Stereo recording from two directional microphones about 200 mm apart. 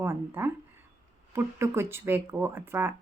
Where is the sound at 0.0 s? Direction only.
10° right (ahead or behind).